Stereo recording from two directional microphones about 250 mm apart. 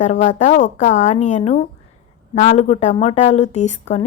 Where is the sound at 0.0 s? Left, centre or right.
Left.